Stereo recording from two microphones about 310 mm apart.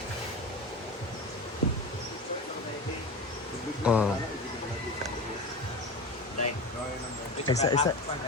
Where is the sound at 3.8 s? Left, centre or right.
Centre.